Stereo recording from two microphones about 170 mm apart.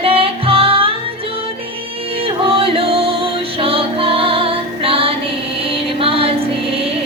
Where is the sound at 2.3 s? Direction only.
35° right (ahead or behind).